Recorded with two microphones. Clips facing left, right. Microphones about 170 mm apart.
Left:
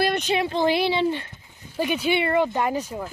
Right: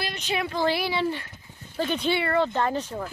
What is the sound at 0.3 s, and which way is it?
Speech, 25° left (ahead or behind).